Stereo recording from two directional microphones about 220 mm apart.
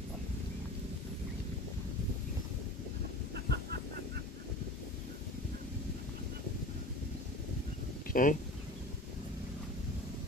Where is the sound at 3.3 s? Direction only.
45° right (ahead or behind).